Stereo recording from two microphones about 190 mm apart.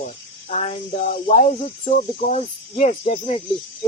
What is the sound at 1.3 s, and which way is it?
Cricket, 35° left (ahead or behind).